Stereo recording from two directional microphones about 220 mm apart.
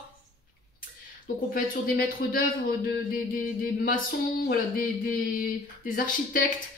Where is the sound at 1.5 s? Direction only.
40° left (ahead or behind).